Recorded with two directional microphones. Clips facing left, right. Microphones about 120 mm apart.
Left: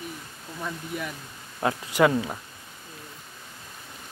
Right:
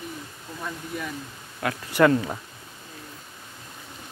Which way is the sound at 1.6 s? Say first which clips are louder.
Left 3 dB; 30° left (ahead or behind).